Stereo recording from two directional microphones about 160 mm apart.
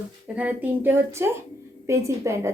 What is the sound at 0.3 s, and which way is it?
A woman's voice, 10° right (ahead or behind).